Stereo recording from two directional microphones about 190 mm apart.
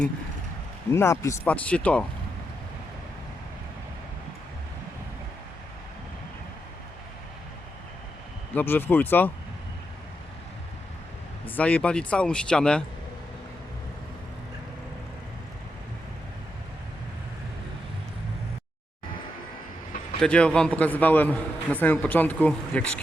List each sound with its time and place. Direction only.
0.9 s a man's voice: 15° left (ahead or behind)
8.5 s a man's voice: 10° left (ahead or behind)
11.5 s speech: 5° left (ahead or behind)
20.2 s a man's voice: 5° left (ahead or behind)